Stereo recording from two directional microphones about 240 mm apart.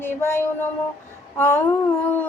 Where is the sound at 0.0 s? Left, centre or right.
Centre.